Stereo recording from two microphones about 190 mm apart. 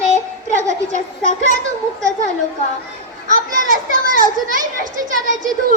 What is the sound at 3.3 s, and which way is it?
Children playing, 45° right (ahead or behind).